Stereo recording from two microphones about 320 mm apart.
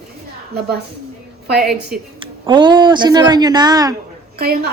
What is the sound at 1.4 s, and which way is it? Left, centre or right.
Speech, right.